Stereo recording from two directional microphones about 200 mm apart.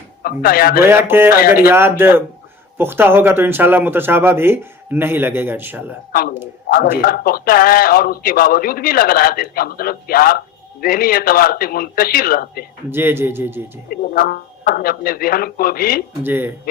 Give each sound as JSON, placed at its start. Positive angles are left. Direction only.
{"t": 0.2, "sound": "a man's voice", "side_deg": 45}
{"t": 0.9, "sound": "speech", "side_deg": -10}
{"t": 1.4, "sound": "a man's voice", "side_deg": 50}
{"t": 1.7, "sound": "speech", "side_deg": -10}
{"t": 6.1, "sound": "a man's voice", "side_deg": 45}
{"t": 12.9, "sound": "speech", "side_deg": -10}
{"t": 13.9, "sound": "a man's voice", "side_deg": 45}
{"t": 16.2, "sound": "speech", "side_deg": -10}